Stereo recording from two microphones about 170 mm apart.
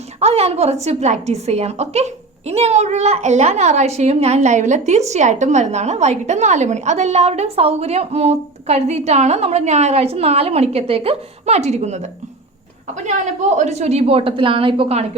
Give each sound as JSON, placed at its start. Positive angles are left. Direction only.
{"t": 0.2, "sound": "a woman's voice", "side_deg": -40}
{"t": 13.1, "sound": "a woman's voice", "side_deg": -45}